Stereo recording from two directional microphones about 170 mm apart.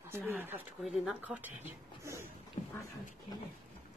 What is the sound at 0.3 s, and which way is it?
Speech, 10° right (ahead or behind).